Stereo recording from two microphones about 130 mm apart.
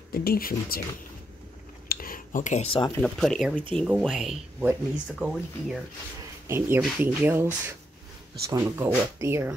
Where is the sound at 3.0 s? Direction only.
Centre (ahead or behind).